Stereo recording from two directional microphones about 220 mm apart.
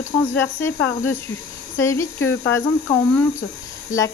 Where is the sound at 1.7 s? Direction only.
10° left (ahead or behind).